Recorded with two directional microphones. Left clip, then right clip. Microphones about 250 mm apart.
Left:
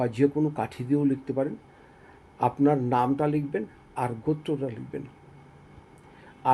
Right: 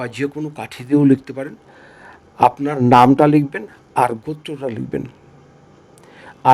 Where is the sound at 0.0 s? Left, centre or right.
Right.